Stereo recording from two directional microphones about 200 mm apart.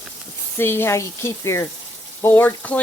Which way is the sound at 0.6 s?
10° left (ahead or behind).